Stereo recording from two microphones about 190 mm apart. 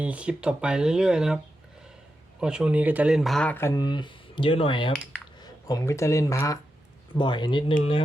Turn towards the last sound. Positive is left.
turn(degrees=25)  # may be behind; listen again after turning